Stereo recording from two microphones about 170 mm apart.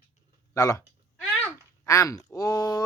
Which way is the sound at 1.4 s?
15° left (ahead or behind).